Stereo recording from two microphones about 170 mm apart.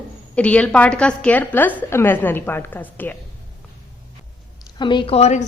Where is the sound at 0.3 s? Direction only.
10° left (ahead or behind).